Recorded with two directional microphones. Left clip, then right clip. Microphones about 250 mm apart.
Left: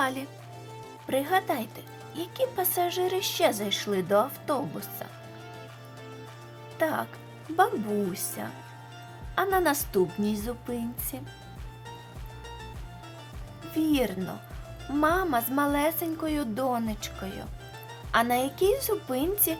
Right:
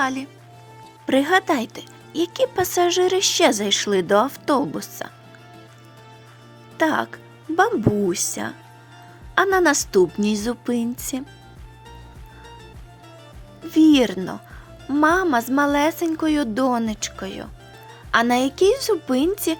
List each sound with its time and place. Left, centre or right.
0.0 s speech: centre
1.0 s speech: right
6.7 s speech: right
8.1 s speech: right
13.7 s speech: right